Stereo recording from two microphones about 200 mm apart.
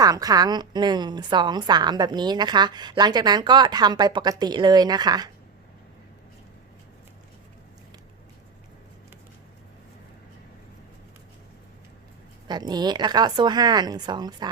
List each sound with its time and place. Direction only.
0.0 s a woman's voice: 20° right (ahead or behind)
12.5 s a woman's voice: 20° right (ahead or behind)